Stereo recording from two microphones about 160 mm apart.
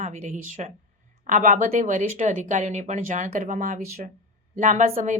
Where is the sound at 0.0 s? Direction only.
50° right (ahead or behind).